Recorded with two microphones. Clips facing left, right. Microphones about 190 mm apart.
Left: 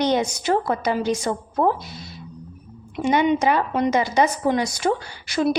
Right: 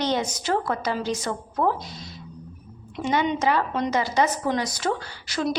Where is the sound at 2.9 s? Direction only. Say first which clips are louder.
Left 5 dB; 15° left (ahead or behind).